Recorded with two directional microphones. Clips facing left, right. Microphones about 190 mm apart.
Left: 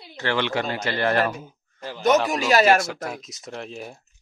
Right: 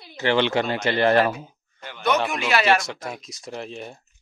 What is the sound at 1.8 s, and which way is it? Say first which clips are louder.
Speech: left 3 dB; 40° left (ahead or behind).